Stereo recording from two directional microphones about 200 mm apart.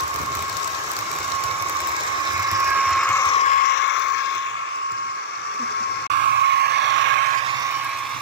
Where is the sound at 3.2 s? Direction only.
25° left (ahead or behind).